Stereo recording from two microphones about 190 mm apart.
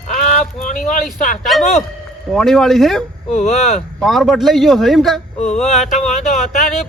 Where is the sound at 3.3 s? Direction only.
35° left (ahead or behind).